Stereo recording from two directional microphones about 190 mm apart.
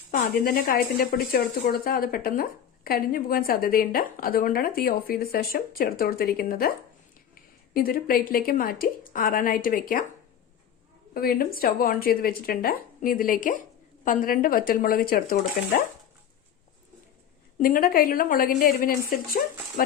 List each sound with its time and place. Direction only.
0.1 s speech: 45° left (ahead or behind)
11.1 s speech: 50° left (ahead or behind)
17.6 s speech: 50° left (ahead or behind)